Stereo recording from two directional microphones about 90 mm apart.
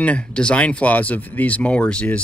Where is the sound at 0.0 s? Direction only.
10° left (ahead or behind).